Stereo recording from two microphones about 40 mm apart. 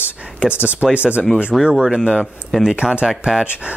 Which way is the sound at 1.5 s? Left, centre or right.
Centre.